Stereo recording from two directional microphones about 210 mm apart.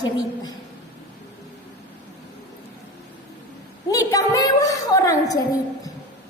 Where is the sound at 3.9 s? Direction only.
15° left (ahead or behind).